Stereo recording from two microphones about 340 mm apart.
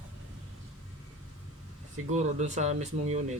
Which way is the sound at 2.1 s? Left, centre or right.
Right.